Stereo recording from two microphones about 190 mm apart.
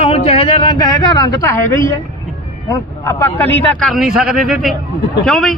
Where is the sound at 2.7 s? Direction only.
15° left (ahead or behind).